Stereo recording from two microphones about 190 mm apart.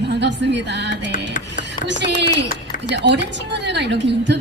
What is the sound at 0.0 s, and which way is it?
A woman's voice, 65° right (ahead or behind).